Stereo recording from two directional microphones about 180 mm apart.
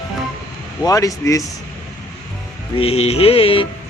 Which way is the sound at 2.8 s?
35° left (ahead or behind).